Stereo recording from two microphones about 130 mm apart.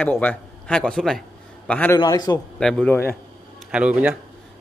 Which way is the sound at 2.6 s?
5° left (ahead or behind).